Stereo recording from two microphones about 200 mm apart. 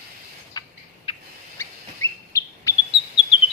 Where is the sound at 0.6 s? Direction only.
20° left (ahead or behind).